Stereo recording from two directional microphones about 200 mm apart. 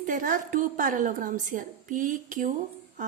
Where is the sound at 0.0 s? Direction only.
45° right (ahead or behind).